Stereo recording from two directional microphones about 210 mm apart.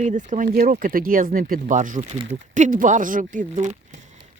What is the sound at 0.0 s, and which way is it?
Speech, 35° right (ahead or behind).